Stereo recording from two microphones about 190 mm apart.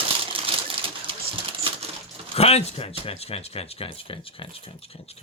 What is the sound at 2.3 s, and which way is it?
Speech, 35° left (ahead or behind).